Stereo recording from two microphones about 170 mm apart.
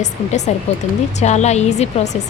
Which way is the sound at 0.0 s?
40° left (ahead or behind).